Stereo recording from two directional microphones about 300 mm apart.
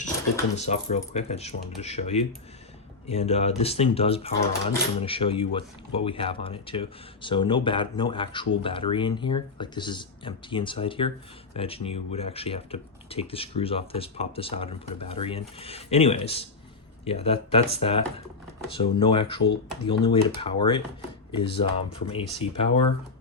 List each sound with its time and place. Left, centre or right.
0.5 s speech: left